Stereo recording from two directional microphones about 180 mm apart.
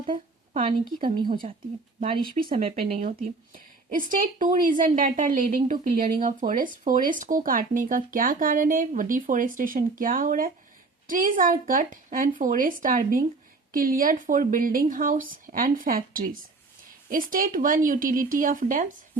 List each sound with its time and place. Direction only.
0.0 s speech: 30° right (ahead or behind)
2.4 s speech: 30° right (ahead or behind)
2.8 s speech: 40° right (ahead or behind)